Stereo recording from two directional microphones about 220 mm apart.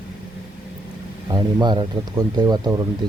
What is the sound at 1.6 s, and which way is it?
Speech, 20° right (ahead or behind).